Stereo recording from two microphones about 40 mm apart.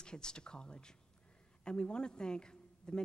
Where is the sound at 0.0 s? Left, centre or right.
Left.